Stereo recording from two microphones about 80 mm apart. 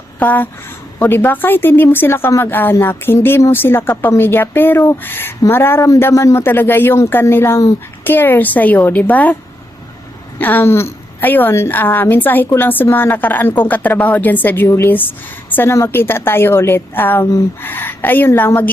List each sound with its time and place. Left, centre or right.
0.2 s a woman's voice: left
10.3 s a woman's voice: left